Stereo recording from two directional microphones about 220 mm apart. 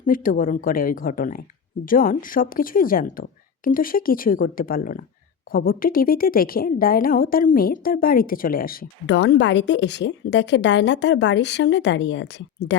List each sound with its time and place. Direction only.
0.0 s a woman's voice: 40° left (ahead or behind); by 12.3 s 55° left (ahead or behind)